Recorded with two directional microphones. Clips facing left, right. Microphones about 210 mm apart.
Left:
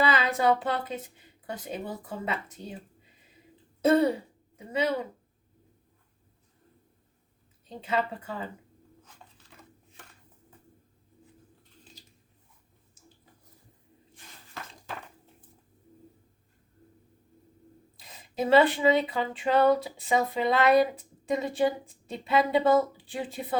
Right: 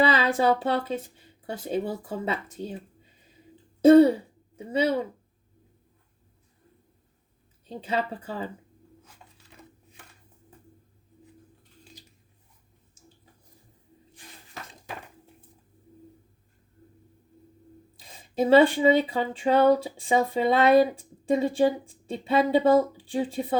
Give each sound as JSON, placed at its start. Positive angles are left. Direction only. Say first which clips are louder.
{"t": 0.0, "sound": "speech", "louder": "right 3 dB", "side_deg": -30}
{"t": 3.8, "sound": "throat clearing", "louder": "right 8 dB", "side_deg": -30}
{"t": 4.5, "sound": "speech", "louder": "right 3 dB", "side_deg": -30}
{"t": 7.8, "sound": "speech", "louder": "right 1 dB", "side_deg": -35}
{"t": 14.5, "sound": "dishes", "louder": "even", "side_deg": -15}
{"t": 18.0, "sound": "speech", "louder": "right 5 dB", "side_deg": -30}